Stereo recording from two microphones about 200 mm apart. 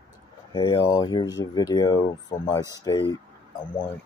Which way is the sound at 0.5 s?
20° left (ahead or behind).